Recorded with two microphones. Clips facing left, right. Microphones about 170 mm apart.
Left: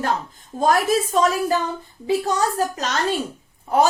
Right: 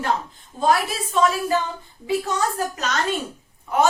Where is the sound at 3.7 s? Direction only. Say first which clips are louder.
Left 2 dB; 35° left (ahead or behind).